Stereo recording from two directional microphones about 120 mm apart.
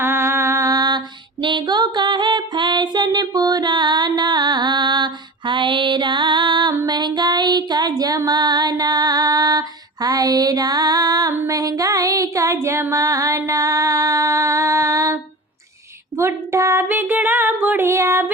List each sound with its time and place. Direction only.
0.0 s music: 20° right (ahead or behind)
16.1 s female singing: 25° right (ahead or behind)